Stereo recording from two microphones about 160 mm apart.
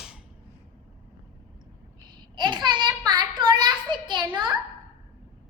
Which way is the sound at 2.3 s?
30° right (ahead or behind).